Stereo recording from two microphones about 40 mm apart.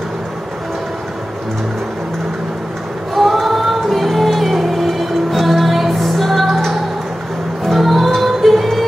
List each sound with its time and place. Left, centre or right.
3.2 s music: centre